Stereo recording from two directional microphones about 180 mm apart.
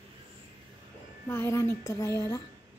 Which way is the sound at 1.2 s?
15° left (ahead or behind).